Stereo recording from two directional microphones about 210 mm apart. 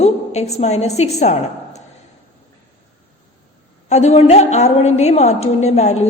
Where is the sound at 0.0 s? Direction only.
30° left (ahead or behind).